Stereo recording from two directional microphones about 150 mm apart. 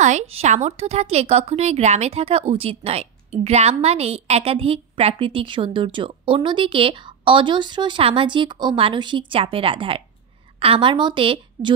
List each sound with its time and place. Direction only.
0.0 s a woman's voice: 45° right (ahead or behind)